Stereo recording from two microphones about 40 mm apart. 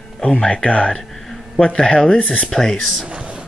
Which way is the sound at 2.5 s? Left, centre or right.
Centre.